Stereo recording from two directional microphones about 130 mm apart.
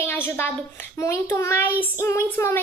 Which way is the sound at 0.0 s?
15° left (ahead or behind).